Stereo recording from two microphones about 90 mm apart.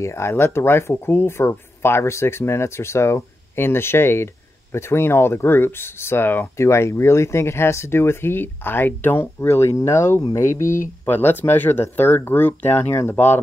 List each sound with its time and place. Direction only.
0.0 s speech: 30° left (ahead or behind)